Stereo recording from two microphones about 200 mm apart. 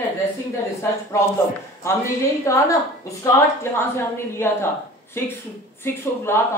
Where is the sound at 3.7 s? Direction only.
10° left (ahead or behind).